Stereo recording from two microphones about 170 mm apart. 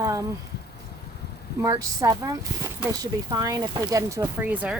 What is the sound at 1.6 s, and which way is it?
Speech, 20° right (ahead or behind).